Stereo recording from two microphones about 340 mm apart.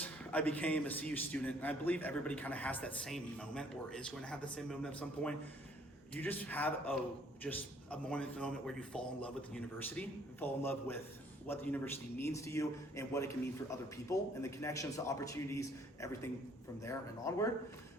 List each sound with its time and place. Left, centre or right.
0.0 s a man's voice: centre